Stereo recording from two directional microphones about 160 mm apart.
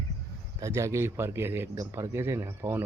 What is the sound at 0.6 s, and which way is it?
A man's voice, 20° right (ahead or behind).